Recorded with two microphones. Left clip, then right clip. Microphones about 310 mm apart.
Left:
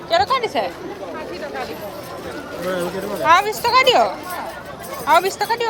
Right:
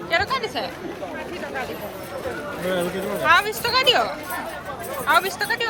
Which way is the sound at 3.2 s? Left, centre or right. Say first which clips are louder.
Left 4 dB; left.